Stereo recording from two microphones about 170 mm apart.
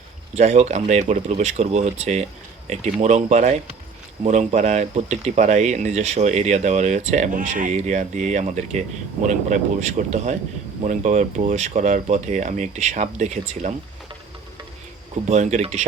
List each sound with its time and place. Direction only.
0.3 s speech: 40° right (ahead or behind)
15.3 s speech: 45° right (ahead or behind)